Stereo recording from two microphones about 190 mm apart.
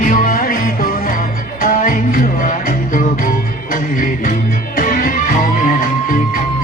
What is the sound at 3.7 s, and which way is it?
Music, 50° left (ahead or behind).